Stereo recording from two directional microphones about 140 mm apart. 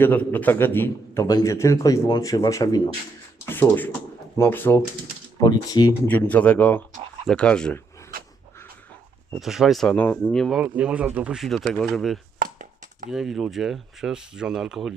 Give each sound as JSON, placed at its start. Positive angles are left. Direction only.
{"t": 0.0, "sound": "a man's voice", "side_deg": 15}
{"t": 3.5, "sound": "speech", "side_deg": 15}
{"t": 5.4, "sound": "a man's voice", "side_deg": 30}
{"t": 6.1, "sound": "speech", "side_deg": 10}
{"t": 8.1, "sound": "dog", "side_deg": -90}
{"t": 9.4, "sound": "speech", "side_deg": 0}
{"t": 10.6, "sound": "speech", "side_deg": -10}
{"t": 12.4, "sound": "a sound", "side_deg": -75}
{"t": 13.1, "sound": "speech", "side_deg": -5}